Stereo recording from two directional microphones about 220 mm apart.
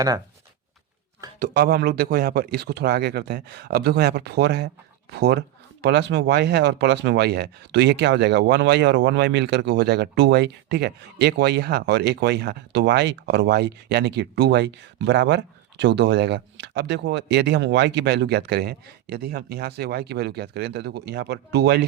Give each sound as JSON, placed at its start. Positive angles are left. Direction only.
{"t": 1.4, "sound": "speech", "side_deg": -45}